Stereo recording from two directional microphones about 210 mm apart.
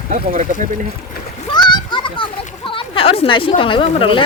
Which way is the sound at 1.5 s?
20° left (ahead or behind).